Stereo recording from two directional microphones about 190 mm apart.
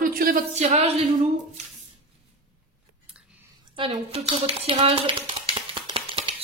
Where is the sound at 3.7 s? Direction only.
30° right (ahead or behind).